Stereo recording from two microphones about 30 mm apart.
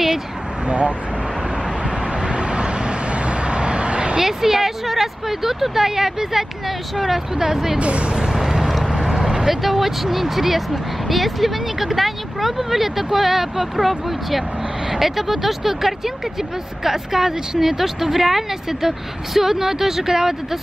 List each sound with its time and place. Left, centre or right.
0.7 s speech: right
2.2 s vehicle: right
4.2 s a woman's voice: centre
7.8 s speech: right
8.4 s vehicle: centre
9.4 s a woman's voice: centre